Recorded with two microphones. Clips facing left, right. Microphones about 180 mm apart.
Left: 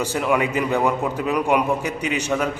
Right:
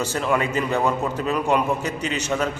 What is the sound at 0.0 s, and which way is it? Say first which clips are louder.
A man's voice: left 2 dB; 15° left (ahead or behind).